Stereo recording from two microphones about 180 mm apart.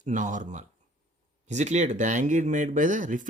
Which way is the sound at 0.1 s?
45° right (ahead or behind).